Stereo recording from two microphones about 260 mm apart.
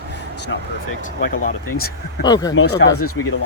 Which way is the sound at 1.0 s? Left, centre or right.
Left.